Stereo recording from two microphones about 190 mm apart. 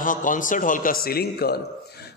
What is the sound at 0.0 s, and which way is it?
A man's voice, 45° left (ahead or behind).